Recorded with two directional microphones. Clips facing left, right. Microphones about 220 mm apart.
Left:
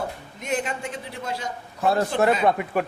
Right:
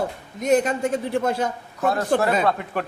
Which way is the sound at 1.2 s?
55° right (ahead or behind).